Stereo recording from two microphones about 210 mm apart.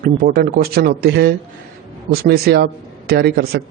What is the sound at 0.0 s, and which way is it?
A man's voice, 45° right (ahead or behind).